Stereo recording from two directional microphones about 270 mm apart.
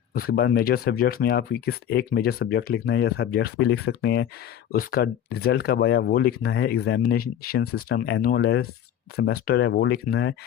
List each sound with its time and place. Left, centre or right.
0.1 s speech: left